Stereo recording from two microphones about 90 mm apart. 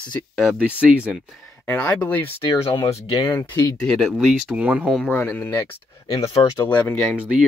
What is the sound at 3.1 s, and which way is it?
Speech, 55° left (ahead or behind).